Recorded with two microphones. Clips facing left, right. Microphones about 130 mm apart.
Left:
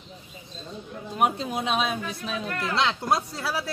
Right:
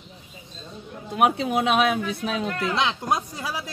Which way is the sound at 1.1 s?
70° right (ahead or behind).